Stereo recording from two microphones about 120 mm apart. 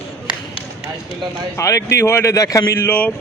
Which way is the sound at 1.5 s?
25° left (ahead or behind).